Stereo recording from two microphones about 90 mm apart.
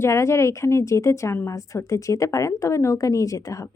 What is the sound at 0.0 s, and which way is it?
A woman's voice, 30° left (ahead or behind).